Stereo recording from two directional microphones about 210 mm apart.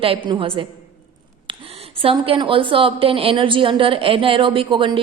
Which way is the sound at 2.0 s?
25° right (ahead or behind).